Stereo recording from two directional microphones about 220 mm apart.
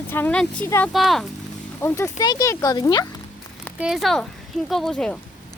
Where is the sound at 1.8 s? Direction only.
10° left (ahead or behind).